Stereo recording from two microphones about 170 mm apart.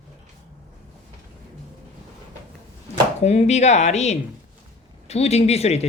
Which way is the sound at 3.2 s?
40° left (ahead or behind).